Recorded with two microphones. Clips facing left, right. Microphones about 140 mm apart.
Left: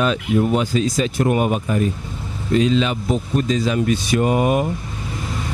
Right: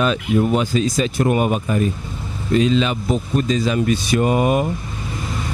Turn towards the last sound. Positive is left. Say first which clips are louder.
# even
turn(degrees=-10)  # may be behind; listen again after turning